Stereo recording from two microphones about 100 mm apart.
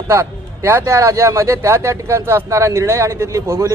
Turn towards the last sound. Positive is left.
turn(degrees=-30)  # may be behind; listen again after turning